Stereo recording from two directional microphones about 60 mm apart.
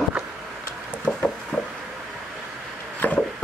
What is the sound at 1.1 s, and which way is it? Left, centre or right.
Wood, centre.